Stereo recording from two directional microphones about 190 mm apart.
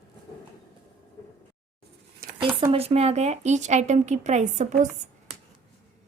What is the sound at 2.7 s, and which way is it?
A woman's voice, 35° right (ahead or behind).